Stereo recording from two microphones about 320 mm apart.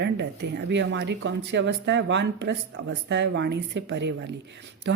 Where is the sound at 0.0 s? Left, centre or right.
Right.